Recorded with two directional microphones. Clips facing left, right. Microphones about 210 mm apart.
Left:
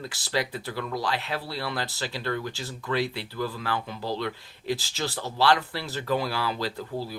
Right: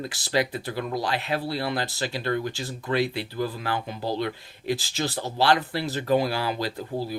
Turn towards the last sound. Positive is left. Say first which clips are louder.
# right 2 dB
turn(degrees=-15)  # may be behind; listen again after turning